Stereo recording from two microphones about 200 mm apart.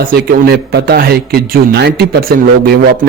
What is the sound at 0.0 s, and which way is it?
A man's voice, 50° right (ahead or behind).